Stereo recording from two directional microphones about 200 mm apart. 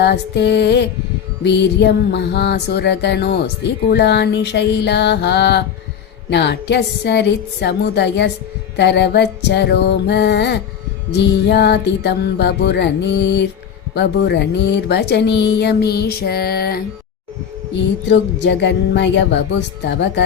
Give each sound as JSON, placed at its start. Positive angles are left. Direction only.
{"t": 0.0, "sound": "music", "side_deg": 55}
{"t": 18.1, "sound": "music", "side_deg": 60}